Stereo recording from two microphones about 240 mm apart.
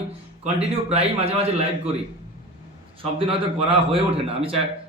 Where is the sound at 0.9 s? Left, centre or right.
Right.